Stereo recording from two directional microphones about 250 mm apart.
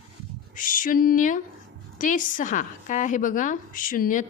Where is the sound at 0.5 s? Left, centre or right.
Left.